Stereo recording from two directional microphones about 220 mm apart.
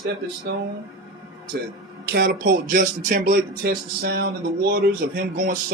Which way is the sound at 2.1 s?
40° right (ahead or behind).